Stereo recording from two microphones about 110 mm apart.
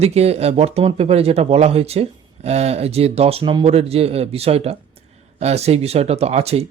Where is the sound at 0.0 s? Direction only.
70° right (ahead or behind).